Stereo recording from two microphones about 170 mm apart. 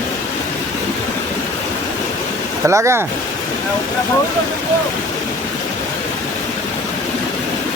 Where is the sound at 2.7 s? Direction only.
15° right (ahead or behind).